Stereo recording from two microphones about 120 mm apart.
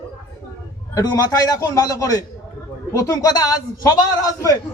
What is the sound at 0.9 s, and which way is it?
A man's voice, 30° left (ahead or behind).